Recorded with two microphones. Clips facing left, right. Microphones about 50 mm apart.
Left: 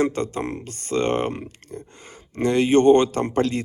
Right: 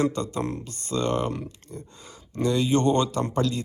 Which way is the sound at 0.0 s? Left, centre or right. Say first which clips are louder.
Left 3 dB; left.